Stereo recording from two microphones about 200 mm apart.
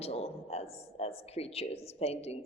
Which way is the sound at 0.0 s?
30° left (ahead or behind).